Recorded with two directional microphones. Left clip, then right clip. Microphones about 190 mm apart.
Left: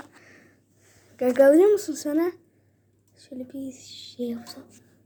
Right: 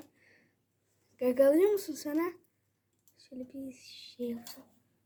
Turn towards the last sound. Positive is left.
turn(degrees=5)  # may be behind; listen again after turning